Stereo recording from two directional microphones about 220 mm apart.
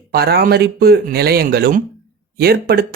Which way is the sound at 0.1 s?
45° right (ahead or behind).